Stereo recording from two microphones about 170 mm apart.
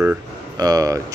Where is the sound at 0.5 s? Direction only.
20° right (ahead or behind).